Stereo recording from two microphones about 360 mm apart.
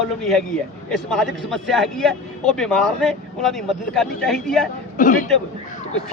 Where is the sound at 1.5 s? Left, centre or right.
Centre.